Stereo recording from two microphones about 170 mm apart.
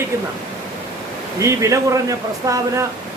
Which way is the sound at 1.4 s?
20° right (ahead or behind).